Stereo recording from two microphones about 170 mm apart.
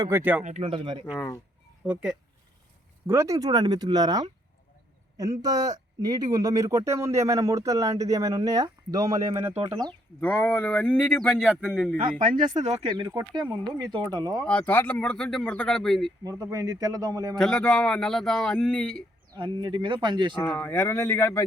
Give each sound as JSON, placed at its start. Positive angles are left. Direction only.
{"t": 0.0, "sound": "speech", "side_deg": -10}
{"t": 0.4, "sound": "speech", "side_deg": -40}
{"t": 1.9, "sound": "speech", "side_deg": -5}
{"t": 3.1, "sound": "speech", "side_deg": -15}
{"t": 10.2, "sound": "speech", "side_deg": 10}
{"t": 12.2, "sound": "speech", "side_deg": -45}
{"t": 12.9, "sound": "speech", "side_deg": -25}
{"t": 14.4, "sound": "speech", "side_deg": 10}
{"t": 16.2, "sound": "speech", "side_deg": -20}
{"t": 17.3, "sound": "speech", "side_deg": 5}
{"t": 19.4, "sound": "speech", "side_deg": -30}
{"t": 20.4, "sound": "speech", "side_deg": 10}